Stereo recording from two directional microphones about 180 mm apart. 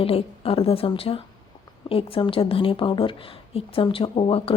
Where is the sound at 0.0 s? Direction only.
30° left (ahead or behind).